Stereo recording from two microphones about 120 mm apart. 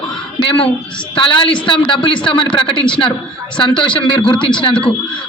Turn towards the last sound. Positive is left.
turn(degrees=40)  # may be behind; listen again after turning